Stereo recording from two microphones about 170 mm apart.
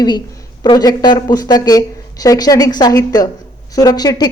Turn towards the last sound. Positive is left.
turn(degrees=25)  # may be behind; listen again after turning